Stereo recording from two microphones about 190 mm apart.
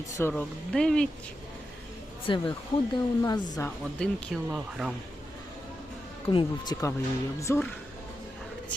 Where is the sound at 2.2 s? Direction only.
25° left (ahead or behind).